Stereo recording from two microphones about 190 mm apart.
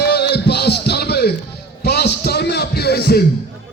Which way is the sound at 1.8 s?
60° left (ahead or behind).